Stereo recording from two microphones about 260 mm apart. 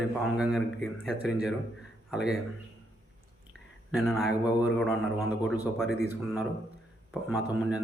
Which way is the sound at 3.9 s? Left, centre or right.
Centre.